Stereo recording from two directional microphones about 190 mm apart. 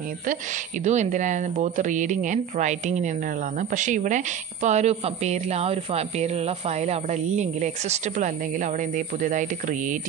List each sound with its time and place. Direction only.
0.3 s a woman's voice: 40° right (ahead or behind)